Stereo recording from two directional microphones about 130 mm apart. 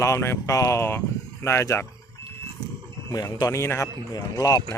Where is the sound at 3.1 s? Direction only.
30° left (ahead or behind).